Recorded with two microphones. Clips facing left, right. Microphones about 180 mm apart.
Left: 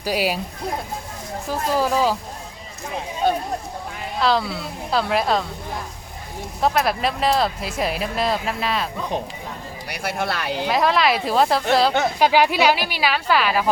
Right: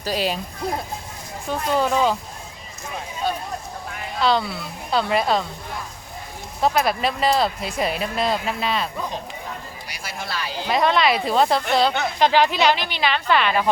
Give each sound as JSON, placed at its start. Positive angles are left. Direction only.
{"t": 0.0, "sound": "a woman's voice", "side_deg": 10}
{"t": 1.5, "sound": "speech", "side_deg": 5}
{"t": 4.2, "sound": "speech", "side_deg": 0}
{"t": 6.6, "sound": "speech", "side_deg": 0}
{"t": 9.9, "sound": "speech", "side_deg": 60}
{"t": 10.7, "sound": "a woman's voice", "side_deg": 0}